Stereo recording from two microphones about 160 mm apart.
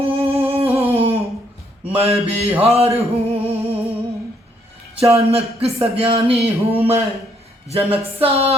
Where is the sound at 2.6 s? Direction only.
40° right (ahead or behind).